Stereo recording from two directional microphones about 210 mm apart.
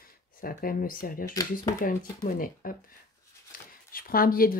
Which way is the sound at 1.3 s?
15° left (ahead or behind).